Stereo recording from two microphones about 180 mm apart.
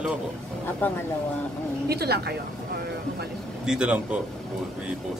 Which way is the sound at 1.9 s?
60° right (ahead or behind).